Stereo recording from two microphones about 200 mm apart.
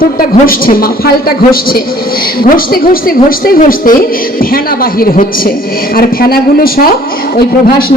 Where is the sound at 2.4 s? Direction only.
45° left (ahead or behind).